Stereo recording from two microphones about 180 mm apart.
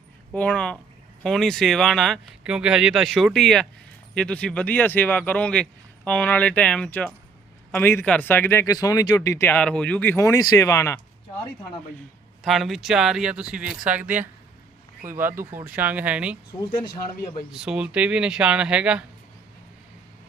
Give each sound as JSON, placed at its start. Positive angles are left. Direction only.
{"t": 0.3, "sound": "speech", "side_deg": 5}
{"t": 12.4, "sound": "speech", "side_deg": 0}
{"t": 16.6, "sound": "speech", "side_deg": 25}
{"t": 17.5, "sound": "speech", "side_deg": -5}